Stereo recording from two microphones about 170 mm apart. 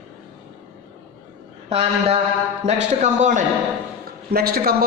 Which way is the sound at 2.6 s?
40° right (ahead or behind).